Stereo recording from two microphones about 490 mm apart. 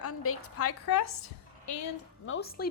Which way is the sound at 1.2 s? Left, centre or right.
Left.